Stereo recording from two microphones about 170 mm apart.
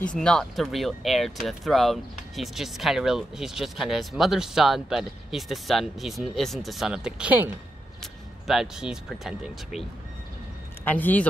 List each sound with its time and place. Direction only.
0.1 s speech: 5° left (ahead or behind)
10.9 s speech: 10° left (ahead or behind)